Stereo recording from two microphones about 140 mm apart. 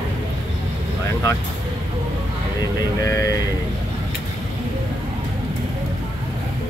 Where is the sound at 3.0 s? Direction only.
25° left (ahead or behind).